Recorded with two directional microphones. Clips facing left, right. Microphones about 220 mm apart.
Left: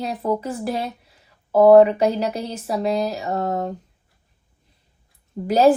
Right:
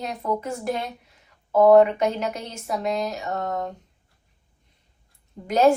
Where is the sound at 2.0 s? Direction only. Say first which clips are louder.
Left 4 dB; 35° left (ahead or behind).